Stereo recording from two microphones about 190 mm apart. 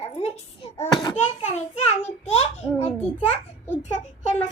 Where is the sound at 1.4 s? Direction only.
35° left (ahead or behind).